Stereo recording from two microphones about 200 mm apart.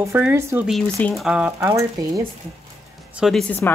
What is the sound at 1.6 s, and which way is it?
Speech, 15° right (ahead or behind).